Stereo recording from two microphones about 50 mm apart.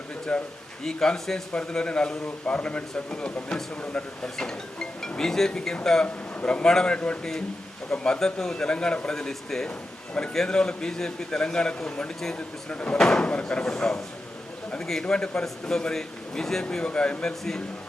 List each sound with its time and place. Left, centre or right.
0.3 s a man's voice: centre
1.5 s a man's voice: left
15.0 s a man's voice: centre
16.8 s a man's voice: left